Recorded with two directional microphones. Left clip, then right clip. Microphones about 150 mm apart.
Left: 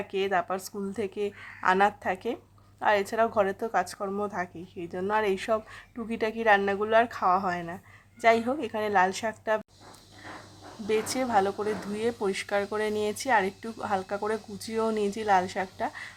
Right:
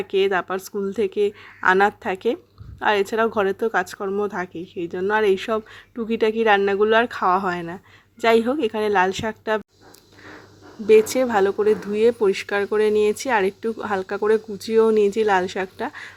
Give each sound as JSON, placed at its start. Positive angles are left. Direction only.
{"t": 0.0, "sound": "speech", "side_deg": -20}
{"t": 10.8, "sound": "speech", "side_deg": -25}